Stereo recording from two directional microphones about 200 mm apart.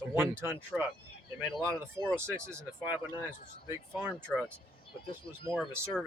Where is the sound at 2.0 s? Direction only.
15° right (ahead or behind).